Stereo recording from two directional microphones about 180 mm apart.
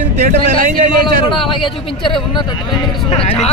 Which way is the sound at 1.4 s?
30° left (ahead or behind).